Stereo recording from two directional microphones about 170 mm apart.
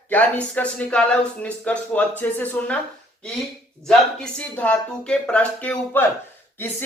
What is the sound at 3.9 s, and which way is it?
Speech, 5° left (ahead or behind).